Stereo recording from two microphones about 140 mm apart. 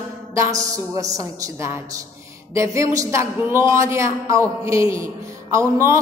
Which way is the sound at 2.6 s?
20° right (ahead or behind).